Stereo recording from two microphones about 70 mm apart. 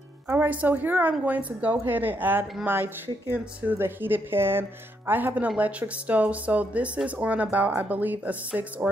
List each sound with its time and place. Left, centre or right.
0.3 s speech: right